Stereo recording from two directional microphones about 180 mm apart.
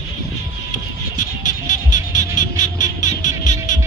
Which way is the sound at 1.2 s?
45° left (ahead or behind).